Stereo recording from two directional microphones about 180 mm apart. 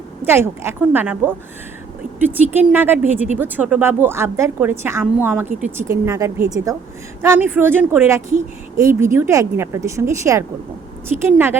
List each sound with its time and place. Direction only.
0.3 s a woman's voice: 15° right (ahead or behind)